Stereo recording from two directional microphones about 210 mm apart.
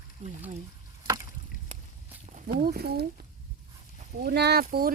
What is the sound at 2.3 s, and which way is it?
Speech, 45° right (ahead or behind).